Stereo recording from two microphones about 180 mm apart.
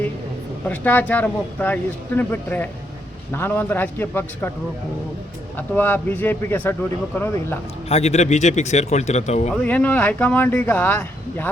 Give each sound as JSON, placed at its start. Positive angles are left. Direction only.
{"t": 0.7, "sound": "speech", "side_deg": 10}
{"t": 5.5, "sound": "speech", "side_deg": 10}
{"t": 7.9, "sound": "speech", "side_deg": 35}
{"t": 9.5, "sound": "speech", "side_deg": 10}